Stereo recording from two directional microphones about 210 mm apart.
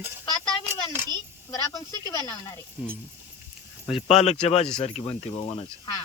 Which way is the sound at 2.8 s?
5° right (ahead or behind).